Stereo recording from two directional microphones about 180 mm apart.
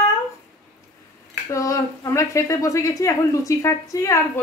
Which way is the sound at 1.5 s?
15° left (ahead or behind).